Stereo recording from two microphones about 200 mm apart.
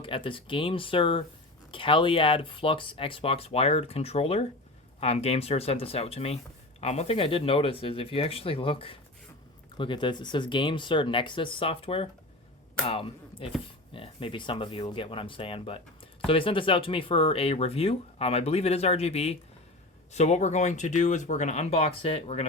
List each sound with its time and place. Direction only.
0.0 s speech: 25° left (ahead or behind)